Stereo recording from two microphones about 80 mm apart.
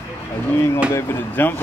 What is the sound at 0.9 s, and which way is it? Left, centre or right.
Speech, left.